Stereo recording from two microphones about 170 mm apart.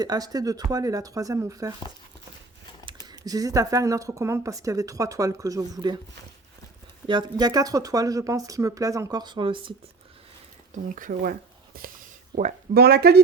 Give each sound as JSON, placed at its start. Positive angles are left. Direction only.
{"t": 0.0, "sound": "speech", "side_deg": -20}
{"t": 2.8, "sound": "speech", "side_deg": -25}
{"t": 7.1, "sound": "speech", "side_deg": -25}
{"t": 10.9, "sound": "speech", "side_deg": -55}
{"t": 12.3, "sound": "speech", "side_deg": -70}